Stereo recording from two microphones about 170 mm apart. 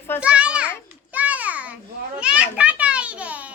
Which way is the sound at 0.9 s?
10° right (ahead or behind).